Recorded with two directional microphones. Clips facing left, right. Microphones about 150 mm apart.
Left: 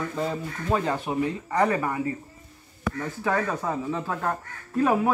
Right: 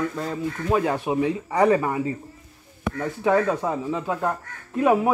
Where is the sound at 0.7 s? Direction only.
10° right (ahead or behind).